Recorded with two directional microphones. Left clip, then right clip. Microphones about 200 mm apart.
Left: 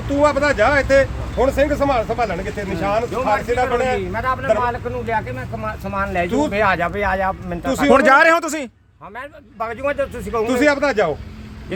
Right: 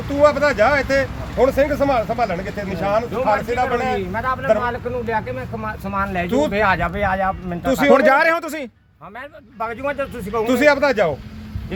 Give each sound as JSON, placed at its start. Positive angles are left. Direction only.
{"t": 0.2, "sound": "speech", "side_deg": -10}
{"t": 3.9, "sound": "speech", "side_deg": 15}
{"t": 7.7, "sound": "speech", "side_deg": -25}
{"t": 7.9, "sound": "speech", "side_deg": 10}
{"t": 9.1, "sound": "speech", "side_deg": 5}
{"t": 10.4, "sound": "speech", "side_deg": -25}